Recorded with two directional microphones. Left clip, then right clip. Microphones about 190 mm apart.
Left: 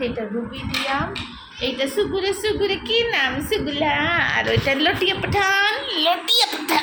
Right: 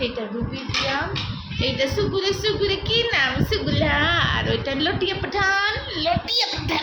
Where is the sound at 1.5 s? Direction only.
5° left (ahead or behind); by 6.8 s 30° left (ahead or behind).